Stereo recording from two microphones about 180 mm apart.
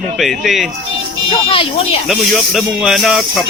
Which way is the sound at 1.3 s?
30° left (ahead or behind).